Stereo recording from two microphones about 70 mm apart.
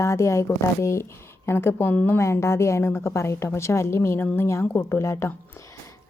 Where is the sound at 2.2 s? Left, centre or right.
Left.